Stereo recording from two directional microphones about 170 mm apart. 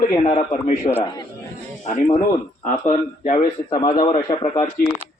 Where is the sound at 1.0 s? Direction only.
20° left (ahead or behind).